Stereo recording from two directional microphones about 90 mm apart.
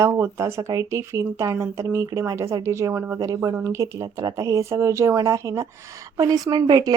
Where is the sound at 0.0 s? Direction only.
30° right (ahead or behind).